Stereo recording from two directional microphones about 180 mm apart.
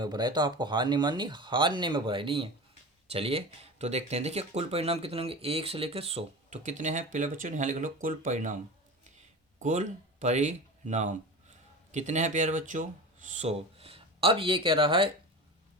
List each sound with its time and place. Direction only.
0.0 s speech: 25° right (ahead or behind); by 8.5 s 45° right (ahead or behind)
9.6 s speech: 40° right (ahead or behind)